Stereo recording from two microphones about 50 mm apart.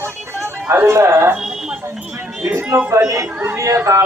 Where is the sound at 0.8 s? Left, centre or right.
Right.